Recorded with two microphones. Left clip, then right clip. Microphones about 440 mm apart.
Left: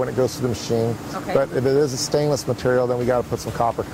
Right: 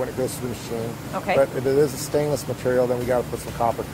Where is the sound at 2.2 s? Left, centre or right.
Left.